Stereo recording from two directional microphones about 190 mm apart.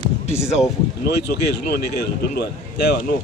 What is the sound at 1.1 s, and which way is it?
Speech, 60° left (ahead or behind).